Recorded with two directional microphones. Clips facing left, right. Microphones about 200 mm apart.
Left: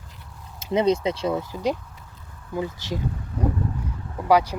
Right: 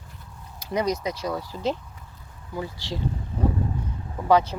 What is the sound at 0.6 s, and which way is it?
Speech, 25° left (ahead or behind).